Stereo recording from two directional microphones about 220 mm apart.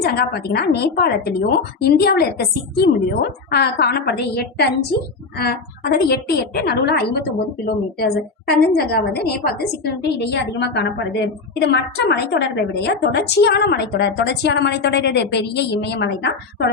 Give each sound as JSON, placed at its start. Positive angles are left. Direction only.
{"t": 0.0, "sound": "a woman's voice", "side_deg": 45}
{"t": 5.4, "sound": "a woman's voice", "side_deg": 45}